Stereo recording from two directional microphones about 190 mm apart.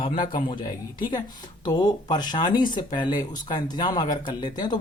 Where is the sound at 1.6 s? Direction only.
20° left (ahead or behind).